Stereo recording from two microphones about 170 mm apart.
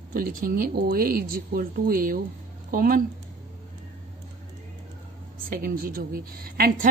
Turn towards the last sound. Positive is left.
turn(degrees=-55)  # may be behind; listen again after turning